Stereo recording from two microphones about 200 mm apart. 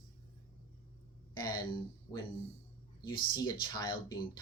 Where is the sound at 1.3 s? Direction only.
20° left (ahead or behind).